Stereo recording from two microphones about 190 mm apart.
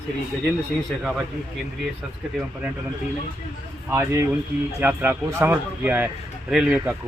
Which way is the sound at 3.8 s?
10° right (ahead or behind).